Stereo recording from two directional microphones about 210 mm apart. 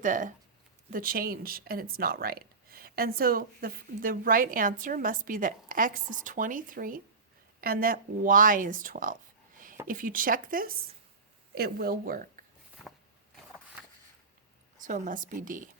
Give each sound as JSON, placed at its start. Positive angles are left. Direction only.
{"t": 0.0, "sound": "speech", "side_deg": -40}
{"t": 14.8, "sound": "speech", "side_deg": -40}